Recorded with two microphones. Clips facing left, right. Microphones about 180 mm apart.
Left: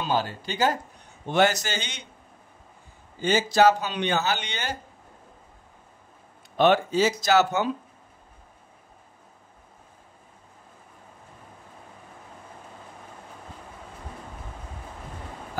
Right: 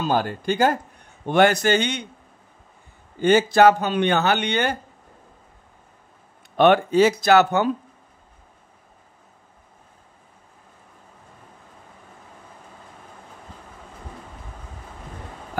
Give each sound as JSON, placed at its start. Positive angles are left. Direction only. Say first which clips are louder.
{"t": 0.0, "sound": "a man's voice", "louder": "right 4 dB", "side_deg": -50}
{"t": 3.2, "sound": "speech", "louder": "right 5 dB", "side_deg": -55}
{"t": 6.5, "sound": "speech", "louder": "right 4 dB", "side_deg": -60}